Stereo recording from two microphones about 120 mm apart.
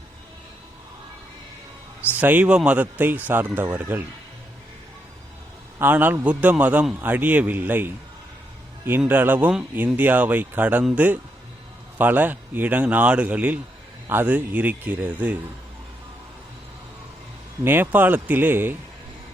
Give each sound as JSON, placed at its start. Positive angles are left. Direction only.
{"t": 2.1, "sound": "a man's voice", "side_deg": -15}
{"t": 5.8, "sound": "a man's voice", "side_deg": -15}
{"t": 9.0, "sound": "a man's voice", "side_deg": -15}
{"t": 17.6, "sound": "a man's voice", "side_deg": -15}